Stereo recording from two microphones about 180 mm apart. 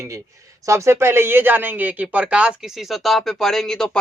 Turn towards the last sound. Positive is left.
turn(degrees=5)  # may be behind; listen again after turning